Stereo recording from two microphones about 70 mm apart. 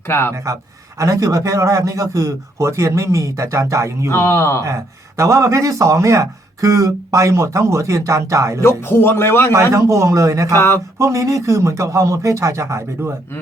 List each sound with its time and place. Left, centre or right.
0.1 s speech: left
0.9 s speech: right
4.1 s speech: left
4.6 s speech: right
8.9 s speech: left
9.5 s speech: right